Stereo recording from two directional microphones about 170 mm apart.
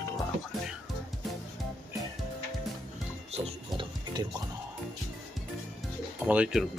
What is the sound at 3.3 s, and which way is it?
Pig, 30° right (ahead or behind).